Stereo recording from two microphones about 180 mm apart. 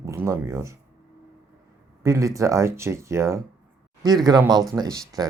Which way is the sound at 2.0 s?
15° right (ahead or behind).